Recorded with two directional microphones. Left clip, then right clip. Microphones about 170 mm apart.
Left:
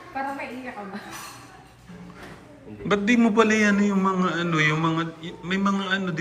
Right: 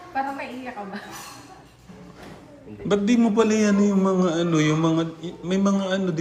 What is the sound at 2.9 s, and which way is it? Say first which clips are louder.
A man's voice: even; 20° right (ahead or behind).